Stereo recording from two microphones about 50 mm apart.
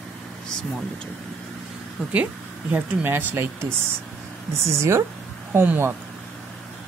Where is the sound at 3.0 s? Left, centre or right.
Right.